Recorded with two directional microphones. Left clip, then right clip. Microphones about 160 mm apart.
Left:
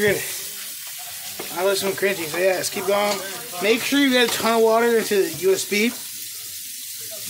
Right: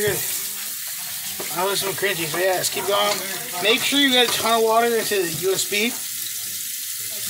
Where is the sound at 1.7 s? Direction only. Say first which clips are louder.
Left 1 dB; 35° left (ahead or behind).